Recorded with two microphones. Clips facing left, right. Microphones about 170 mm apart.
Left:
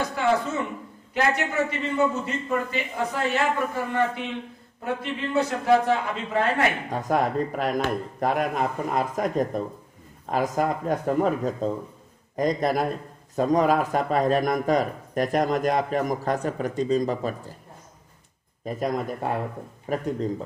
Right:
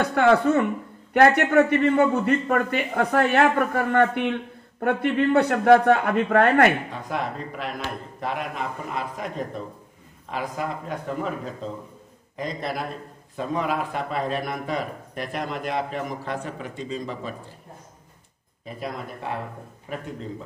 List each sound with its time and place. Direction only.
0.0 s a man's voice: 60° right (ahead or behind)
6.9 s speech: 45° left (ahead or behind)
18.7 s speech: 45° left (ahead or behind)